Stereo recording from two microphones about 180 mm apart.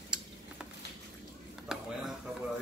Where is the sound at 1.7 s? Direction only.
5° right (ahead or behind).